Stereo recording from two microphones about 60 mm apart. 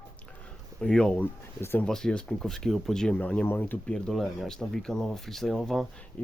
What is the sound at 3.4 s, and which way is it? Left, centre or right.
Speech, left.